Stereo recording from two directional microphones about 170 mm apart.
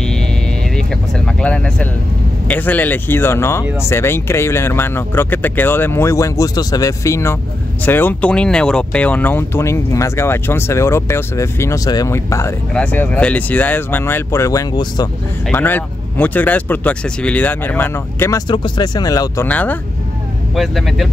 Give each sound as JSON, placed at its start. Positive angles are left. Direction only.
{"t": 0.7, "sound": "vehicle", "side_deg": 5}
{"t": 2.4, "sound": "speech", "side_deg": 10}
{"t": 15.5, "sound": "speech", "side_deg": 10}
{"t": 18.5, "sound": "speech", "side_deg": 25}
{"t": 19.4, "sound": "speech", "side_deg": 10}